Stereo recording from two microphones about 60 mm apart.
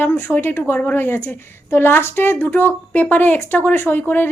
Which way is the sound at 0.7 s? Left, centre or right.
Left.